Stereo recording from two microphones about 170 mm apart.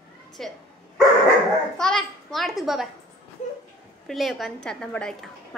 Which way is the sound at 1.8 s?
5° left (ahead or behind).